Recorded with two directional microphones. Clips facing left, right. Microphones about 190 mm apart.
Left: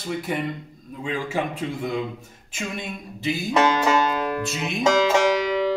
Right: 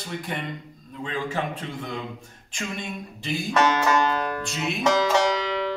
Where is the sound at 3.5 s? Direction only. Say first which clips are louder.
Left 1 dB; 15° left (ahead or behind).